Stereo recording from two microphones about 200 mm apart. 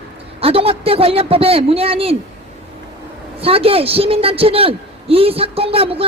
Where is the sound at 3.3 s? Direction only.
30° right (ahead or behind).